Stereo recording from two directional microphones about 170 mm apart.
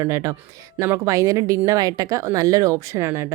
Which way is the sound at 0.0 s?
20° right (ahead or behind).